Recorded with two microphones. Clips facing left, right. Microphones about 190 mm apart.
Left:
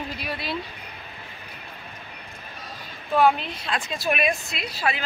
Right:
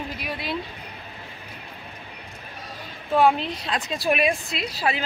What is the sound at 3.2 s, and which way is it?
A woman's voice, 30° right (ahead or behind).